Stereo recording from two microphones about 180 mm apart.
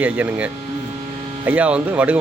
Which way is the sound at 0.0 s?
10° right (ahead or behind).